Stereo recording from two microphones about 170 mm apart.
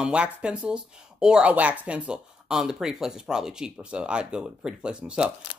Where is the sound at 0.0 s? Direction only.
5° right (ahead or behind).